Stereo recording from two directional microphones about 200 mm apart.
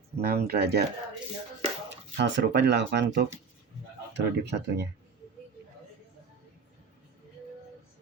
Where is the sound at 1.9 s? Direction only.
60° right (ahead or behind).